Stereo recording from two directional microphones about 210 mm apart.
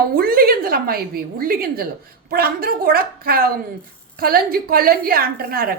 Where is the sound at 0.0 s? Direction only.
45° right (ahead or behind).